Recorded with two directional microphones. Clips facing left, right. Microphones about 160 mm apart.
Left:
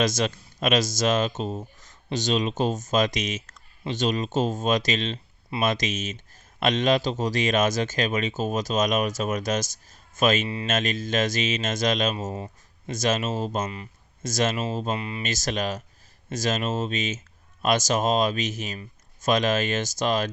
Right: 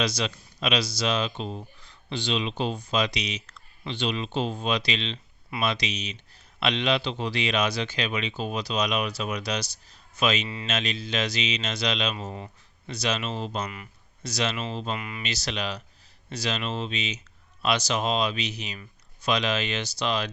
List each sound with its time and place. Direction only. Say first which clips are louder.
0.0 s speech: left 4 dB; 45° left (ahead or behind)
14.9 s speech: left 4 dB; 30° left (ahead or behind)
15.2 s speech: left 4 dB; 45° left (ahead or behind)